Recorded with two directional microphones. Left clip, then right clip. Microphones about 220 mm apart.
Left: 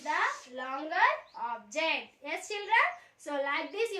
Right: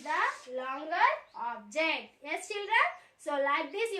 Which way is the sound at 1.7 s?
15° right (ahead or behind).